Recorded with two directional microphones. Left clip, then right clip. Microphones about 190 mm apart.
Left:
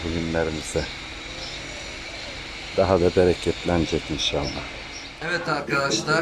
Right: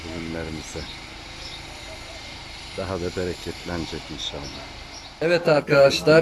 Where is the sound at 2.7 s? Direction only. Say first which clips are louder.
Left 10 dB; 5° left (ahead or behind).